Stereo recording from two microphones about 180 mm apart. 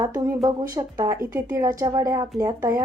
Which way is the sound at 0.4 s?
20° right (ahead or behind).